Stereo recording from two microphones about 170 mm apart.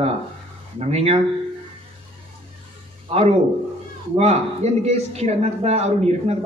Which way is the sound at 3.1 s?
35° right (ahead or behind).